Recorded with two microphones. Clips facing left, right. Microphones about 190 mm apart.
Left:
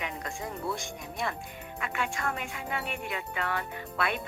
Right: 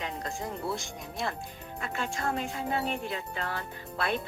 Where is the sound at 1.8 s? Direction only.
35° right (ahead or behind).